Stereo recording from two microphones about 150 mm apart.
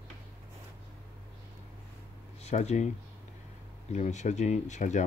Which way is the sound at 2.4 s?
50° left (ahead or behind).